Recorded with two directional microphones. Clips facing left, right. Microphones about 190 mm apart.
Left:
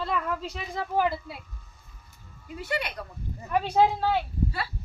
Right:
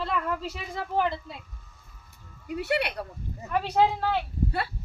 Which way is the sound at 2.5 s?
65° right (ahead or behind).